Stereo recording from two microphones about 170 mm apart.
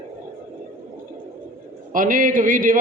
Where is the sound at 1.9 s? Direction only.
50° right (ahead or behind).